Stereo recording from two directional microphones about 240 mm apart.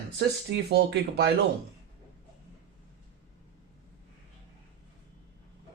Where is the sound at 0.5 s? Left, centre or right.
Right.